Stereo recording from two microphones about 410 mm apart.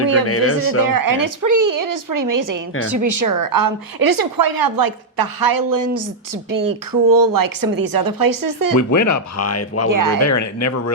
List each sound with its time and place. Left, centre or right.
0.3 s speech: left
0.9 s a woman's voice: right
8.8 s speech: left
9.9 s a woman's voice: right
10.2 s speech: left